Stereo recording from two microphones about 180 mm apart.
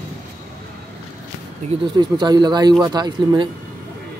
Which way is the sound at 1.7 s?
35° right (ahead or behind).